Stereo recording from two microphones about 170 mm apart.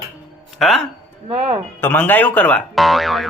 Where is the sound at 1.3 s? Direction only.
35° right (ahead or behind).